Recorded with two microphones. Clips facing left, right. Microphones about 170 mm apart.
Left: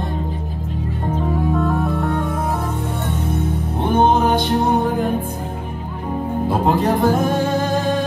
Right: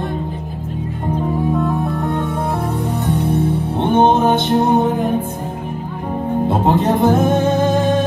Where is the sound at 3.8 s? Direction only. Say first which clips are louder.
Right 2 dB; 25° right (ahead or behind).